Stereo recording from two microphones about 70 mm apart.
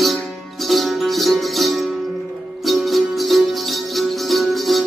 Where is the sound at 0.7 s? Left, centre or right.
Centre.